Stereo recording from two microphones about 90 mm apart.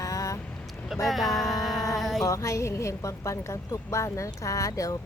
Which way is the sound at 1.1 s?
Centre (ahead or behind).